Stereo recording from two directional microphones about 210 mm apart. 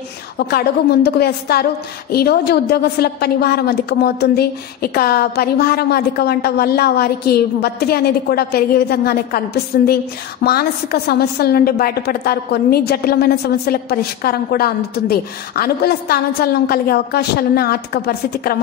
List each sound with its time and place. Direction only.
0.5 s a woman's voice: 50° left (ahead or behind)